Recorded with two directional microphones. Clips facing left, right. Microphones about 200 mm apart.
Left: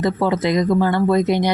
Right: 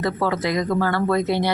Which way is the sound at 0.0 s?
20° left (ahead or behind).